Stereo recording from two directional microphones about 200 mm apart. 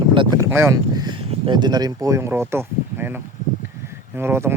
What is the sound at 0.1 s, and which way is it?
Speech, 25° right (ahead or behind).